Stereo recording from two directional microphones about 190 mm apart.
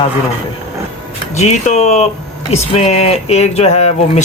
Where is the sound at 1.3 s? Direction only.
40° left (ahead or behind).